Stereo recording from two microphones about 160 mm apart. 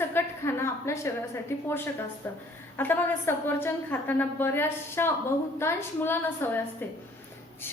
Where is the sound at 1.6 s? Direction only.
15° left (ahead or behind).